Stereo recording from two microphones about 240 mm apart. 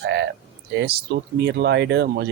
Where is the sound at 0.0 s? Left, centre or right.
Right.